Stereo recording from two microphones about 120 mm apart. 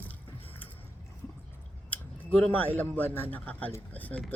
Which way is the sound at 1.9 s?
15° left (ahead or behind).